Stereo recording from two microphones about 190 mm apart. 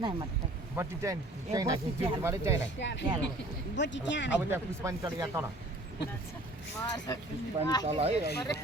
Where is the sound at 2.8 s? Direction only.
65° left (ahead or behind).